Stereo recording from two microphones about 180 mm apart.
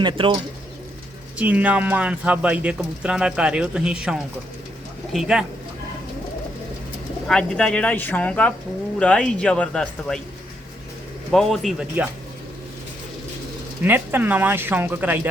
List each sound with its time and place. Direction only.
0.0 s speech: 25° right (ahead or behind)
1.4 s speech: 10° right (ahead or behind)
7.3 s speech: 5° left (ahead or behind)
11.3 s speech: centre (ahead or behind)
13.8 s speech: 10° right (ahead or behind)